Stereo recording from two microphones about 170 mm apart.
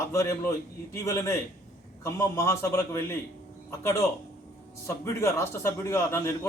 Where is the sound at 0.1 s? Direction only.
15° left (ahead or behind).